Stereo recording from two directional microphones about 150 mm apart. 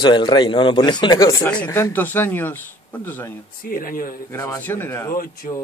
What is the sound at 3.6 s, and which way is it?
Speech, 70° left (ahead or behind).